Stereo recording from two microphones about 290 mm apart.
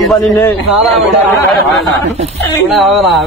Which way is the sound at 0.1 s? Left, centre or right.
Centre.